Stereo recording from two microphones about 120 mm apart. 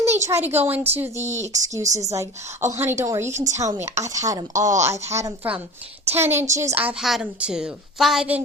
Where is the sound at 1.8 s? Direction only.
80° right.